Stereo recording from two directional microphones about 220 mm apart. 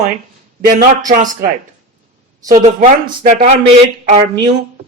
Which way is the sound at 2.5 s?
35° right (ahead or behind).